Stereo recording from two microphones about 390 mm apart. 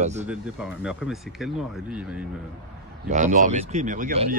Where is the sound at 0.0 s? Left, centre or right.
Centre.